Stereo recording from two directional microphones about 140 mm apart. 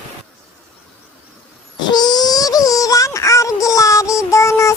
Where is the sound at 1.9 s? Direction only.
30° left (ahead or behind).